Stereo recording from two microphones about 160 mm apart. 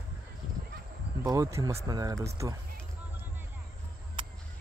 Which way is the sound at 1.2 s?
20° right (ahead or behind).